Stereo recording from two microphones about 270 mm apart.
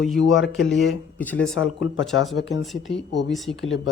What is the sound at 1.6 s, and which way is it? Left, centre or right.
Speech, left.